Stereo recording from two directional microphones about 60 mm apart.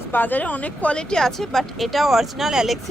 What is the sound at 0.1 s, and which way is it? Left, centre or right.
Speech, left.